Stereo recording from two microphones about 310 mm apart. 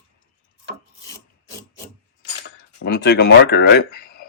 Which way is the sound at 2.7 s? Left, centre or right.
Left.